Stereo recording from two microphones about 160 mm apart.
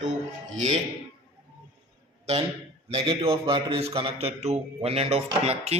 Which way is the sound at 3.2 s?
35° right (ahead or behind).